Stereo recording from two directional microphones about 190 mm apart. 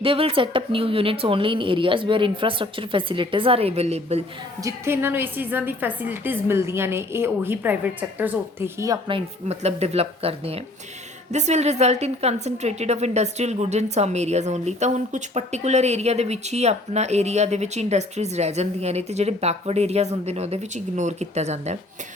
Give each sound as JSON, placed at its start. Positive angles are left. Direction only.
{"t": 0.0, "sound": "speech", "side_deg": -30}
{"t": 4.6, "sound": "a woman's voice", "side_deg": -10}